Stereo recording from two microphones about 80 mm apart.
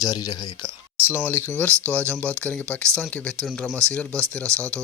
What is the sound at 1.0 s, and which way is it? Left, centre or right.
Speech, left.